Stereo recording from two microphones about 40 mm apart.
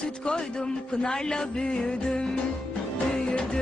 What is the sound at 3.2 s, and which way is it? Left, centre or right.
Music, left.